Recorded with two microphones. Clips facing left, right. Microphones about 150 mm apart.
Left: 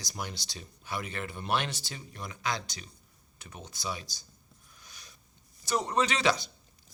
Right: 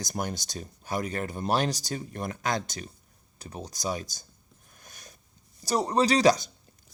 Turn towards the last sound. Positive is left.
turn(degrees=-40)  # may be behind; listen again after turning